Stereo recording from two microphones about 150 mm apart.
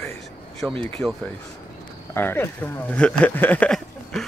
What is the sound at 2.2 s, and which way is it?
Speech, 15° left (ahead or behind).